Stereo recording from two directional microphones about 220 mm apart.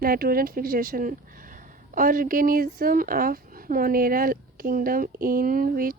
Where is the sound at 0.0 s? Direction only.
40° right (ahead or behind).